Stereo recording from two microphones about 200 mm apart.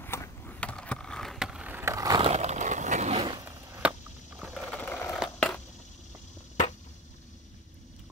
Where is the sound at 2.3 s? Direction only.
35° right (ahead or behind).